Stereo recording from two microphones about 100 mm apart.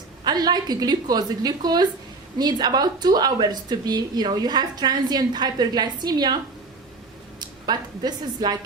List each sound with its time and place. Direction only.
0.3 s a woman's voice: 45° right (ahead or behind)